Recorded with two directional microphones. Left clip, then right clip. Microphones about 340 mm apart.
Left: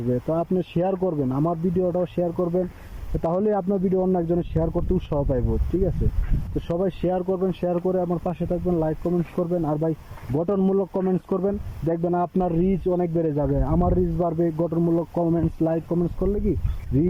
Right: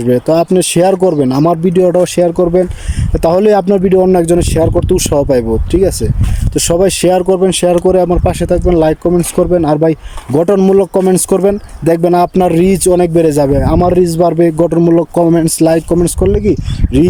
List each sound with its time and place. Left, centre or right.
0.1 s speech: right